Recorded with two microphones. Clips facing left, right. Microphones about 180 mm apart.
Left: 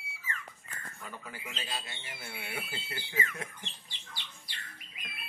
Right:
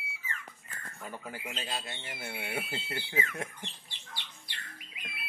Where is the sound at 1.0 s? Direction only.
45° right (ahead or behind).